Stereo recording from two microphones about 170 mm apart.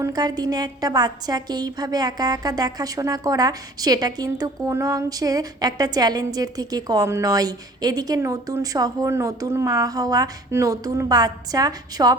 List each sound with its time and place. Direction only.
0.0 s a woman's voice: 25° right (ahead or behind)